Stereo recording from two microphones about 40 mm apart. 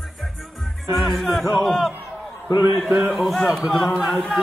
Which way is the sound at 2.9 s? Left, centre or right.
Right.